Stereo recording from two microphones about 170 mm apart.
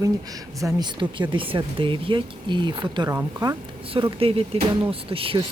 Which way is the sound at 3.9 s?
35° right (ahead or behind).